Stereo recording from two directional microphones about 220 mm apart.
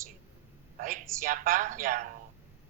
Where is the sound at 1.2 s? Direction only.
40° right (ahead or behind).